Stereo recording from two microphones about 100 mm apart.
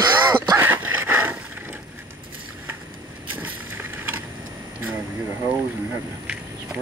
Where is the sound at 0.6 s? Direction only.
20° right (ahead or behind).